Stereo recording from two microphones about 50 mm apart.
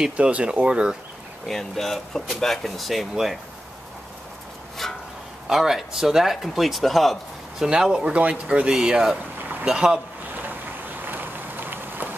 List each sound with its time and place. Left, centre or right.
0.2 s speech: right
1.5 s speech: centre
4.8 s a sound: centre
5.5 s speech: centre
7.5 s speech: centre
10.3 s vehicle: right